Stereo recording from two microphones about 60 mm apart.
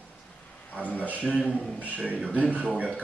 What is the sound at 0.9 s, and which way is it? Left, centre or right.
Speech, left.